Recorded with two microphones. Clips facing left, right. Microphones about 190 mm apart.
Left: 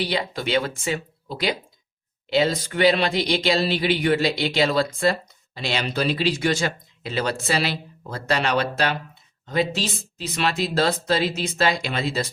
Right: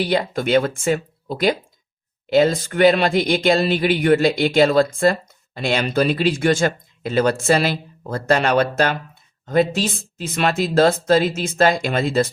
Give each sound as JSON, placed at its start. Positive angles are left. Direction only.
{"t": 0.0, "sound": "speech", "side_deg": -50}